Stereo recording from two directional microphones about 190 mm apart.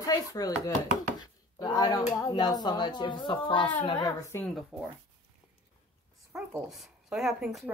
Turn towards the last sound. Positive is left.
turn(degrees=0)  # may be behind; listen again after turning